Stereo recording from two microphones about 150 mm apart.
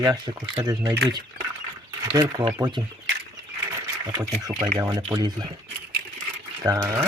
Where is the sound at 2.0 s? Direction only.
25° right (ahead or behind).